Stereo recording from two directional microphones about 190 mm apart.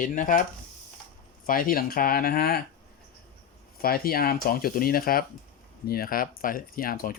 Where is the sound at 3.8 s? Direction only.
50° left (ahead or behind).